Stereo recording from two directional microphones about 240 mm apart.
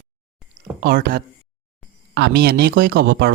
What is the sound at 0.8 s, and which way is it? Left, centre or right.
Speech, right.